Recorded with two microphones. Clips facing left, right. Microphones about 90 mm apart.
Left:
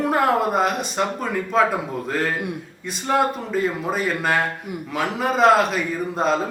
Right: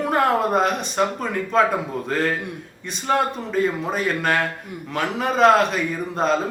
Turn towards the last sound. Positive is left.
turn(degrees=0)  # may be behind; listen again after turning